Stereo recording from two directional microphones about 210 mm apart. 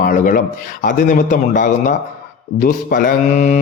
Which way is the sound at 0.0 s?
40° left (ahead or behind).